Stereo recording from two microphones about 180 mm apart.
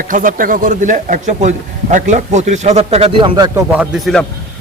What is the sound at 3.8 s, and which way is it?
Speech, centre (ahead or behind).